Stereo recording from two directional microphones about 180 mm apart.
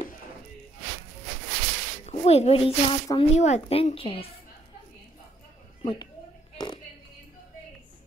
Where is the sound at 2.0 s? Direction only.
35° left (ahead or behind).